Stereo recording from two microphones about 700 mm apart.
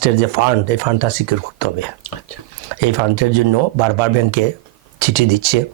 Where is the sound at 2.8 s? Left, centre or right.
Right.